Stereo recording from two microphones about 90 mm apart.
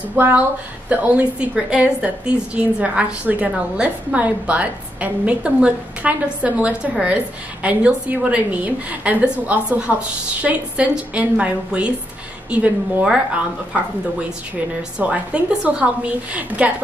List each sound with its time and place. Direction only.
0.1 s a woman's voice: 20° right (ahead or behind)
14.8 s a woman's voice: 15° right (ahead or behind)